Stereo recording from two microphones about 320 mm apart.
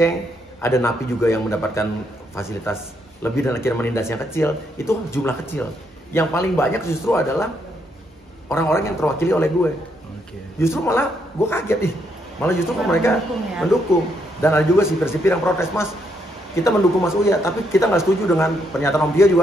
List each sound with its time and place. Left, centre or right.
0.6 s speech: centre
8.5 s speech: centre
14.4 s speech: centre